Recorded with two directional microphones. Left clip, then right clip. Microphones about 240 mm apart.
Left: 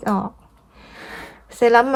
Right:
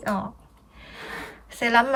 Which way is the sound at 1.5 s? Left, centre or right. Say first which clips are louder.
Left 6 dB; left.